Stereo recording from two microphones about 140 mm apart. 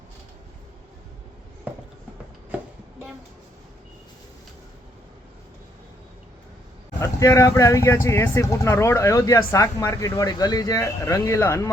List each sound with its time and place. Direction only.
7.0 s speech: 25° left (ahead or behind)